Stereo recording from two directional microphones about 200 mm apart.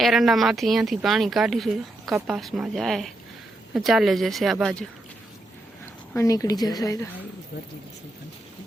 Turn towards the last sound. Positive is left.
turn(degrees=20)  # may be behind; listen again after turning